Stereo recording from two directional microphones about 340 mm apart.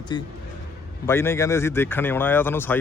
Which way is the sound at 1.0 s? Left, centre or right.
Centre.